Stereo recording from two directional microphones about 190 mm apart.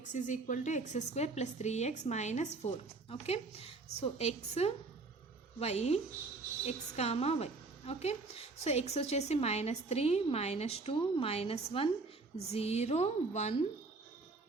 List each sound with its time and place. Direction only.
0.1 s a woman's voice: 40° left (ahead or behind)